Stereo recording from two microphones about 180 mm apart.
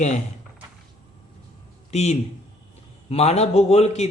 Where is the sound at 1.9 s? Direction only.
40° left (ahead or behind).